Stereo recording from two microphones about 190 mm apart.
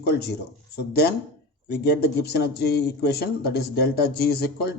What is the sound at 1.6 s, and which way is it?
Speech, 60° left (ahead or behind).